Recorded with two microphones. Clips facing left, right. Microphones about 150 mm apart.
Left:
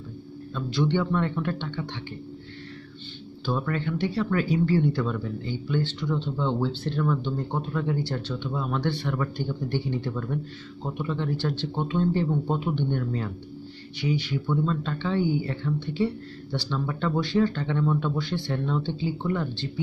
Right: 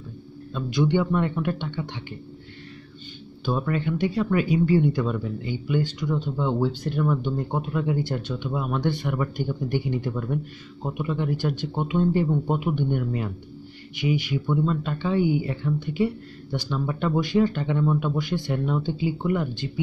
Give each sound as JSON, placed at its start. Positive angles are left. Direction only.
{"t": 0.6, "sound": "speech", "side_deg": -15}
{"t": 3.4, "sound": "speech", "side_deg": -15}